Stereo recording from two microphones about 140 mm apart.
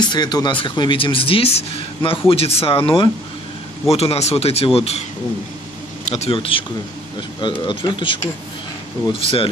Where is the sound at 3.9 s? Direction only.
45° left (ahead or behind).